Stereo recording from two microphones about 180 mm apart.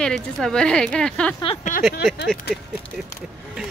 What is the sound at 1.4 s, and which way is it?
Speech, 35° left (ahead or behind).